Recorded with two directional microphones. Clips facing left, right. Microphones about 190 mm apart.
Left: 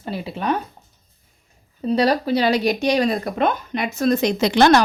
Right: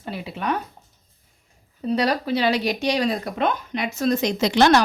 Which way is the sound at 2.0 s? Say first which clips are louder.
Left 4 dB; 35° left (ahead or behind).